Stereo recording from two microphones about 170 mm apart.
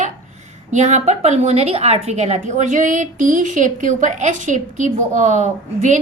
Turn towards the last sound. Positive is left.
turn(degrees=-45)  # may be behind; listen again after turning